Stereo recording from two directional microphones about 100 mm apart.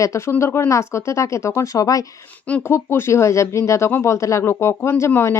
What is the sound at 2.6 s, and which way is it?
Speech, 25° left (ahead or behind).